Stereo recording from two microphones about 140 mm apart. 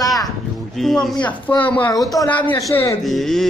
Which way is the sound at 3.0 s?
Centre (ahead or behind).